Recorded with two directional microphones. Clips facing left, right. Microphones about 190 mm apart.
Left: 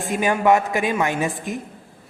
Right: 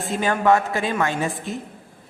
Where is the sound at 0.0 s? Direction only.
15° left (ahead or behind).